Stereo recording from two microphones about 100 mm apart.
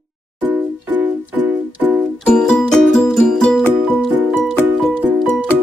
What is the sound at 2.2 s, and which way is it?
Music, 10° left (ahead or behind).